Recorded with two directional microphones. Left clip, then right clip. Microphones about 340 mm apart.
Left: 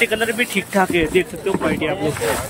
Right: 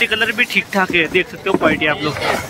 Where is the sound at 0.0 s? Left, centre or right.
Centre.